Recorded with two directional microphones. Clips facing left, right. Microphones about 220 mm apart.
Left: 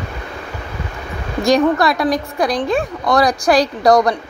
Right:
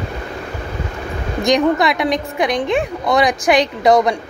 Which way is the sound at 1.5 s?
20° right (ahead or behind).